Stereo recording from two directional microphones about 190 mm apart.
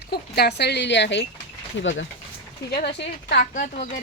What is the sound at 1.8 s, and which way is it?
Speech, 75° left (ahead or behind).